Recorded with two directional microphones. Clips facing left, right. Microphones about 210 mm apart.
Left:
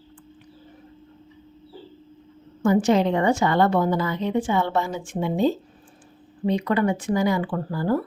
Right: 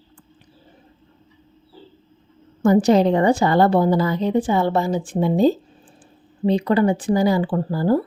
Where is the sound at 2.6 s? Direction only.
40° right (ahead or behind).